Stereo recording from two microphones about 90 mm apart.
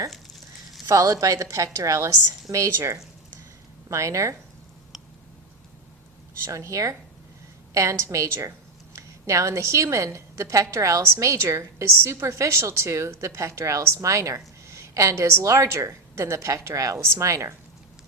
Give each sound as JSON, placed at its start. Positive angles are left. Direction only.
{"t": 0.9, "sound": "a woman's voice", "side_deg": -35}
{"t": 6.4, "sound": "a woman's voice", "side_deg": -30}